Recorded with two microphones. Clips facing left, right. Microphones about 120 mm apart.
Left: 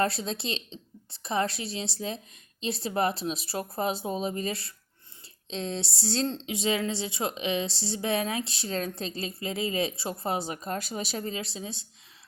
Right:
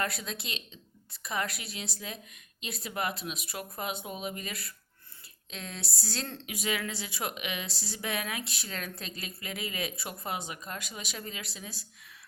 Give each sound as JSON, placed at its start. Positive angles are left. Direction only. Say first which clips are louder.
{"t": 0.0, "sound": "a woman's voice", "louder": "left 7 dB", "side_deg": 30}